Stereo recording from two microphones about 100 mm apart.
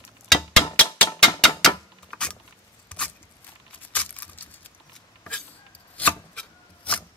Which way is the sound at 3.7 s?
15° left (ahead or behind).